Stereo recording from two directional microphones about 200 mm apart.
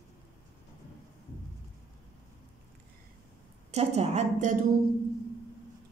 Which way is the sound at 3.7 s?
30° right (ahead or behind).